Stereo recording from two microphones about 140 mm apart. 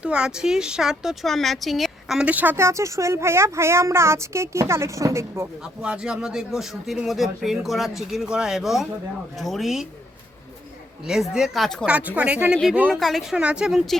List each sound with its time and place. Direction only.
0.0 s speech: 5° right (ahead or behind)
5.8 s speech: 5° right (ahead or behind)
11.0 s speech: 5° right (ahead or behind)
11.9 s speech: 10° right (ahead or behind)
12.9 s speech: centre (ahead or behind)